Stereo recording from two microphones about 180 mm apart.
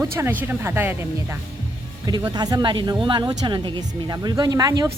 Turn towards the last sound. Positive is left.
turn(degrees=-20)  # may be behind; listen again after turning